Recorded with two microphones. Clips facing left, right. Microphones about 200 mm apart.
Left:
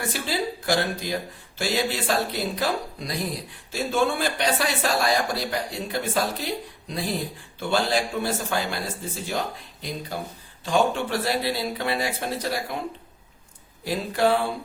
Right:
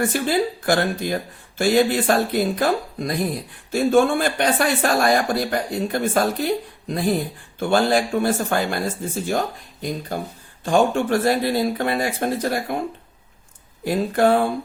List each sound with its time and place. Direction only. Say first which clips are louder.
0.0 s speech: right 7 dB; 50° right (ahead or behind)
10.1 s speech: right 5 dB; 50° right (ahead or behind)
13.8 s speech: right 5 dB; 50° right (ahead or behind)